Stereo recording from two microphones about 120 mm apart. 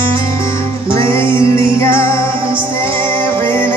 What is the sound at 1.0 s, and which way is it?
Music, 45° right (ahead or behind).